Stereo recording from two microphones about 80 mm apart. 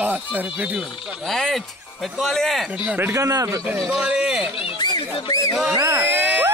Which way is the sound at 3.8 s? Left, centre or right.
Centre.